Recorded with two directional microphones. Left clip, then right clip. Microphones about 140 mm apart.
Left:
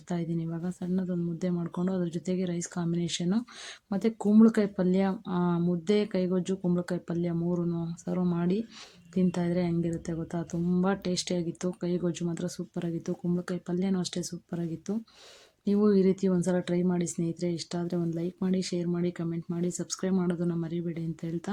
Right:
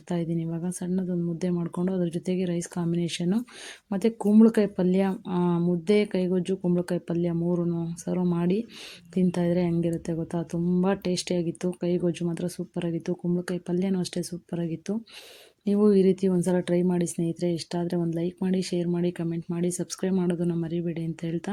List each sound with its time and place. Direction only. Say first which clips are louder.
0.1 s speech: right 4 dB; 15° right (ahead or behind)